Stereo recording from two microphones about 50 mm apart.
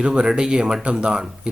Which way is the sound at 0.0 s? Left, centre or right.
Centre.